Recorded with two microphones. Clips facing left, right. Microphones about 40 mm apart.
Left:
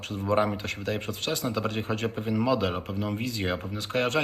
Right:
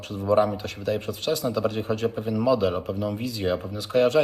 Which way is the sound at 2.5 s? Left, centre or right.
Left.